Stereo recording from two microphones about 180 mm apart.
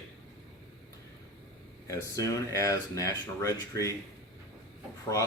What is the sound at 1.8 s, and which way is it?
Speech, 20° left (ahead or behind).